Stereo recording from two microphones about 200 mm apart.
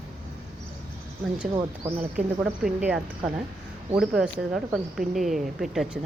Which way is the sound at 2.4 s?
5° right (ahead or behind).